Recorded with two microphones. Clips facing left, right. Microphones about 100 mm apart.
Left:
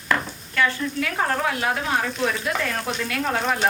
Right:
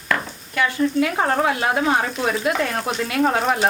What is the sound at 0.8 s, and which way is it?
Speech, 25° right (ahead or behind).